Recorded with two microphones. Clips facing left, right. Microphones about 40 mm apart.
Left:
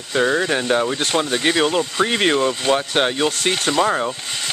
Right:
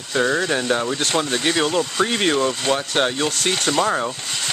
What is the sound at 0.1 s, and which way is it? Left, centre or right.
Speech, centre.